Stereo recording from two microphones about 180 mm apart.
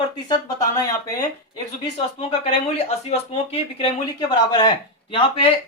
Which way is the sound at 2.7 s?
35° left (ahead or behind).